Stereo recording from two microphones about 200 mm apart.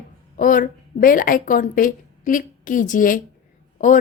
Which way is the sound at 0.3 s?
40° left (ahead or behind).